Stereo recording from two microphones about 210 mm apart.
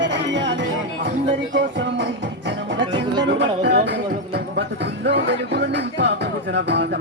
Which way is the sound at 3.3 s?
55° right (ahead or behind).